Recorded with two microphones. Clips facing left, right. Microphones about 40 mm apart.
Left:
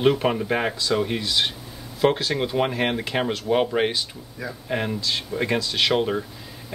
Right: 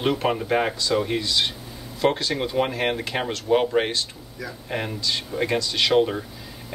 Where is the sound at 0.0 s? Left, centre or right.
Centre.